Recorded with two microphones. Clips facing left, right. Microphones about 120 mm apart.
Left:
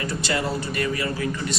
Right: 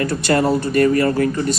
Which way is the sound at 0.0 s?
55° right (ahead or behind).